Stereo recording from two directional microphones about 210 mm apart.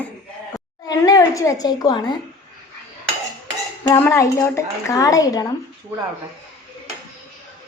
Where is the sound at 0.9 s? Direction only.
15° left (ahead or behind).